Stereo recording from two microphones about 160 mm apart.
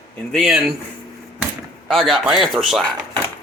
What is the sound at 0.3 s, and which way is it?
Speech, centre (ahead or behind).